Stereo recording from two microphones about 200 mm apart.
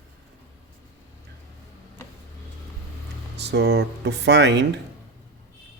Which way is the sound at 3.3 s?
55° right (ahead or behind).